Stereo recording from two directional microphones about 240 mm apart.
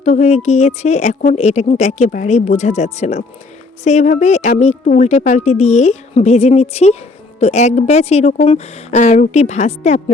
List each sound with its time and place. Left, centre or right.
0.0 s speech: left